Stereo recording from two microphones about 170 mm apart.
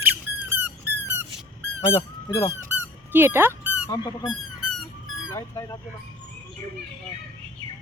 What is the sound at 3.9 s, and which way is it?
Speech, 25° left (ahead or behind).